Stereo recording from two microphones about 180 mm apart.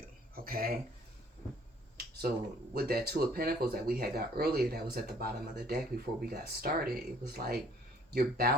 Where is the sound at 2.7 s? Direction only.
60° right (ahead or behind).